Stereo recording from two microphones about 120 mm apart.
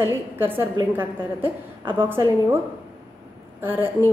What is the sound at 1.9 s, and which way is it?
Speech, 15° right (ahead or behind).